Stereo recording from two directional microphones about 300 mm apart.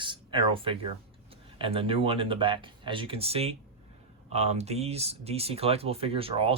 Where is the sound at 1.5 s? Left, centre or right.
Centre.